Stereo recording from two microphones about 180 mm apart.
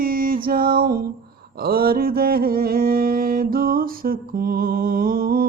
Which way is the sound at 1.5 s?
55° right (ahead or behind).